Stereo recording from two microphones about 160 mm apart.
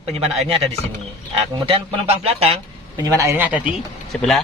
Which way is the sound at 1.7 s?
35° right (ahead or behind).